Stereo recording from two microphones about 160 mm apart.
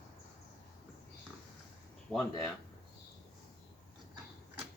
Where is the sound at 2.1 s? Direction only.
Centre (ahead or behind).